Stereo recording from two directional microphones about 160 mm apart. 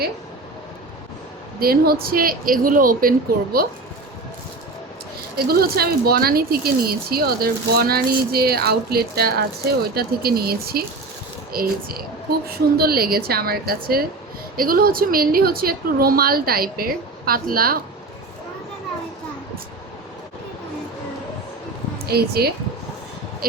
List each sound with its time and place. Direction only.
1.5 s speech: 70° right (ahead or behind)
5.5 s speech: 75° right (ahead or behind)
21.9 s a woman's voice: 80° right
23.4 s speech: 65° right (ahead or behind)